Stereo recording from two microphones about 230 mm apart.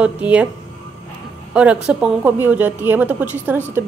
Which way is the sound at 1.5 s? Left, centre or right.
Centre.